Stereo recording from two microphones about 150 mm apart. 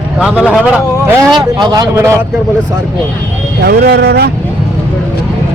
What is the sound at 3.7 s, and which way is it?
Speech, 90° right.